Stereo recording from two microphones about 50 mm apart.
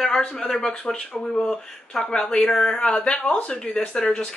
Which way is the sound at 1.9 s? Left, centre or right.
Centre.